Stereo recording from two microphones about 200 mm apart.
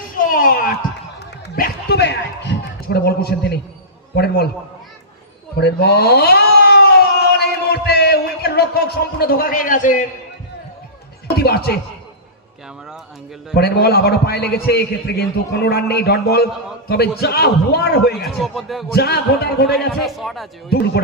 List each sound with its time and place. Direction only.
0.3 s a sound: 45° left (ahead or behind)
4.1 s a man's voice: 50° left (ahead or behind)
5.5 s speech: 55° left (ahead or behind)
7.3 s music: 55° left (ahead or behind)
11.3 s a man's voice: 50° left (ahead or behind)
13.5 s a man's voice: 55° left (ahead or behind)
18.1 s speech: centre (ahead or behind)
18.9 s a man's voice: 50° left (ahead or behind)
20.1 s speech: centre (ahead or behind)
20.7 s a man's voice: 55° left (ahead or behind)